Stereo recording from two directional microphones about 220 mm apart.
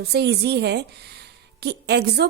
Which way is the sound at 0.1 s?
50° right (ahead or behind).